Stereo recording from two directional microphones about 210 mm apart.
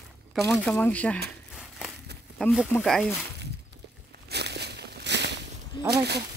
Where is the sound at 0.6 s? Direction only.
5° left (ahead or behind).